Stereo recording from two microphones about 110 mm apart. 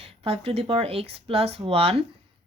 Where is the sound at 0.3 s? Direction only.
60° right (ahead or behind).